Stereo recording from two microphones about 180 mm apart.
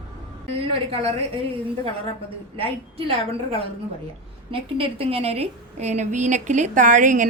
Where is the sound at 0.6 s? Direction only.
30° right (ahead or behind).